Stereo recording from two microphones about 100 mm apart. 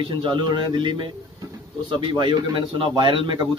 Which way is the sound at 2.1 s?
55° right (ahead or behind).